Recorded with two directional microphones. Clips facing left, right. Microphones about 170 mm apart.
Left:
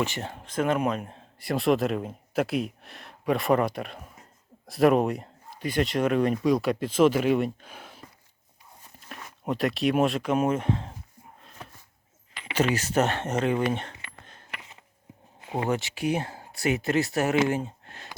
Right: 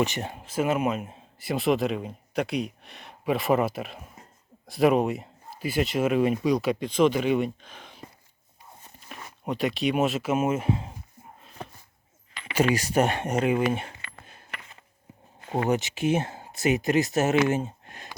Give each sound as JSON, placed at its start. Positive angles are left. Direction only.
{"t": 0.0, "sound": "speech", "side_deg": -15}
{"t": 9.0, "sound": "speech", "side_deg": 0}
{"t": 12.5, "sound": "speech", "side_deg": -10}
{"t": 15.4, "sound": "a sound", "side_deg": 5}
{"t": 15.7, "sound": "speech", "side_deg": -20}
{"t": 17.5, "sound": "a sound", "side_deg": -20}